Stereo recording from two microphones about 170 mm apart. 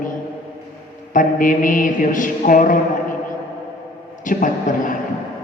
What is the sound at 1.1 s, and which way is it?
A man's voice, 50° left (ahead or behind).